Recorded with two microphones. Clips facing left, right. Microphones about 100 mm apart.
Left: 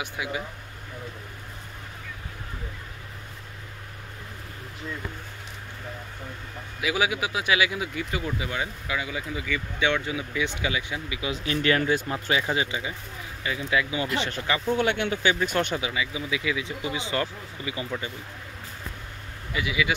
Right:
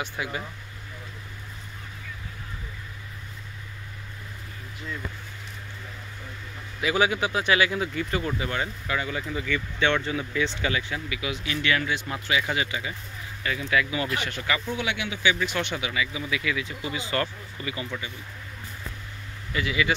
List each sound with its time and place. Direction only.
0.0 s speech: 10° left (ahead or behind)
6.8 s speech: 5° left (ahead or behind); by 14.6 s 30° left (ahead or behind)
14.7 s speech: 50° left (ahead or behind)
15.7 s speech: 25° left (ahead or behind)
19.5 s speech: 10° left (ahead or behind)